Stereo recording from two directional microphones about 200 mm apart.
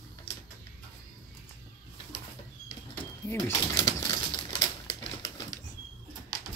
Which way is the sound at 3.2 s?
15° left (ahead or behind).